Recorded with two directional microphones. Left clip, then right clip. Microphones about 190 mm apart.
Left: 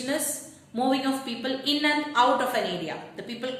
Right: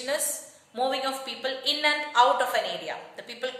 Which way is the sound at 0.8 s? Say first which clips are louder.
Left 1 dB; 20° right (ahead or behind).